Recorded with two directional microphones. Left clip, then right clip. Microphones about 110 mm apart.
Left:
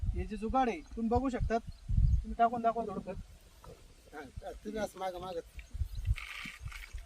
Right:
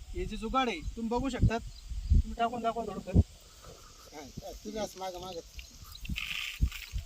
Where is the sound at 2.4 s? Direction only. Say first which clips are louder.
Left 2 dB; 20° left (ahead or behind).